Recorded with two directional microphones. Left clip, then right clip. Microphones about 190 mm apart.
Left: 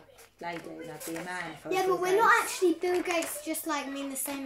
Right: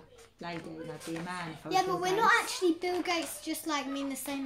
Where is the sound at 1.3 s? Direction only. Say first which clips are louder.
Left 3 dB; 10° right (ahead or behind).